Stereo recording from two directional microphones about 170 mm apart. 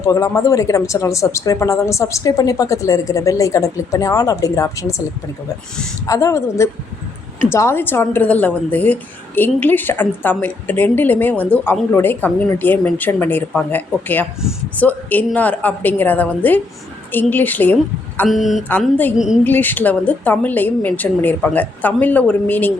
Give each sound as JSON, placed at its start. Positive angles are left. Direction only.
{"t": 0.0, "sound": "speech", "side_deg": 20}
{"t": 6.1, "sound": "a woman's voice", "side_deg": 20}
{"t": 18.3, "sound": "speech", "side_deg": 0}
{"t": 19.5, "sound": "a woman's voice", "side_deg": 10}